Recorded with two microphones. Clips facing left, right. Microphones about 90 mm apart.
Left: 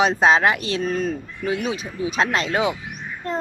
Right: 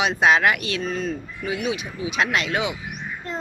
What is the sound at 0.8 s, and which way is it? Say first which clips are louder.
Speech: left 3 dB; 45° left (ahead or behind).